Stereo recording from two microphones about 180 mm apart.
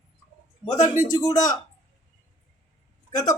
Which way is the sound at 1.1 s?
20° left (ahead or behind).